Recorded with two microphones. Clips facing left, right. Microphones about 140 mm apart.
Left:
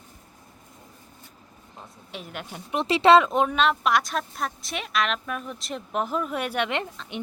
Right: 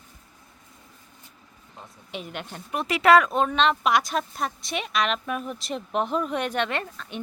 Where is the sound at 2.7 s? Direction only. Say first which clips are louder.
Left 1 dB; 30° left (ahead or behind).